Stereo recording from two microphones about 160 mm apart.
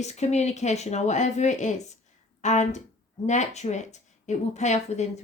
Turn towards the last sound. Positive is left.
turn(degrees=45)  # may be behind; listen again after turning